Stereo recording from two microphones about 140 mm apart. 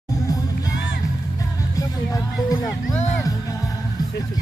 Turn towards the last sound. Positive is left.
turn(degrees=25)  # may be behind; listen again after turning